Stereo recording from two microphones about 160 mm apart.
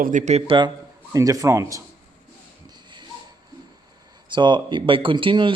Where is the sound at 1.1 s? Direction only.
20° right (ahead or behind).